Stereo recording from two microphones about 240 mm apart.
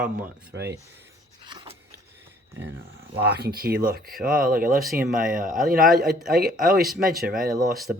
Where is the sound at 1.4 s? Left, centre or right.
Centre.